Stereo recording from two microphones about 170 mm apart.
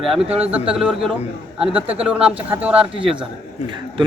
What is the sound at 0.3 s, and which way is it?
Speech, 35° right (ahead or behind).